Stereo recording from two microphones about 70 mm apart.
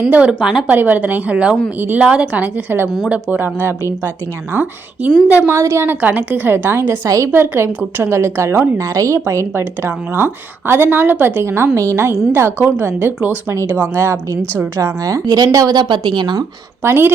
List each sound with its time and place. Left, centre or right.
0.1 s a woman's voice: centre
5.5 s a woman's voice: right
5.8 s a woman's voice: right
7.3 s a woman's voice: right
14.8 s a woman's voice: right
15.2 s a woman's voice: right
16.8 s a woman's voice: right